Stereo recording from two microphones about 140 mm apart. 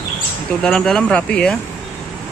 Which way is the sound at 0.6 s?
5° left (ahead or behind).